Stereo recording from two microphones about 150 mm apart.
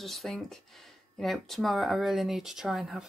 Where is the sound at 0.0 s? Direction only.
Centre (ahead or behind).